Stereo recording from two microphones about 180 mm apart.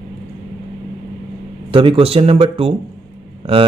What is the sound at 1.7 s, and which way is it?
Speech, 30° right (ahead or behind).